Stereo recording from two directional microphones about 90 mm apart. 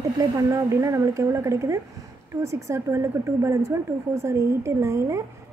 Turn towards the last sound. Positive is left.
turn(degrees=-35)  # may be behind; listen again after turning